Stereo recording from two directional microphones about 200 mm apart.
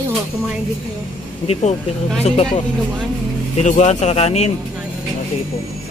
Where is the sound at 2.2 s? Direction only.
30° left (ahead or behind).